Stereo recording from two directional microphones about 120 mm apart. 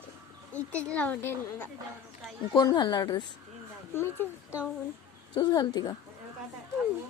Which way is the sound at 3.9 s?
20° left (ahead or behind).